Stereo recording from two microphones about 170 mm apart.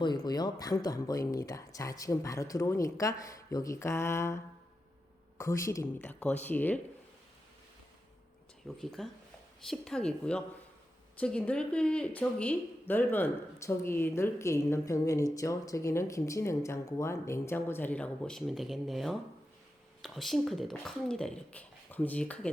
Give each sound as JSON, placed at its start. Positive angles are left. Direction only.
{"t": 0.0, "sound": "speech", "side_deg": 25}
{"t": 5.4, "sound": "speech", "side_deg": 15}
{"t": 8.6, "sound": "speech", "side_deg": 0}